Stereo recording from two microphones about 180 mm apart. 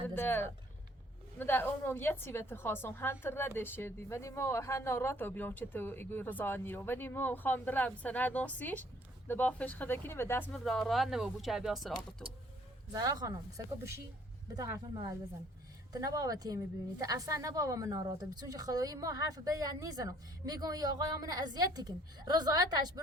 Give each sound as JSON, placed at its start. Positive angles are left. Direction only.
{"t": 0.2, "sound": "a woman's voice", "side_deg": 10}
{"t": 12.9, "sound": "a woman's voice", "side_deg": -20}
{"t": 14.5, "sound": "a woman's voice", "side_deg": -20}